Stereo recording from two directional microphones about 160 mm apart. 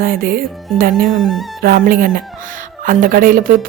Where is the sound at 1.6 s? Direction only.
65° right (ahead or behind).